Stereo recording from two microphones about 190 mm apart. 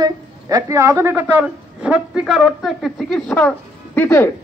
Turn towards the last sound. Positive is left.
turn(degrees=10)  # may be behind; listen again after turning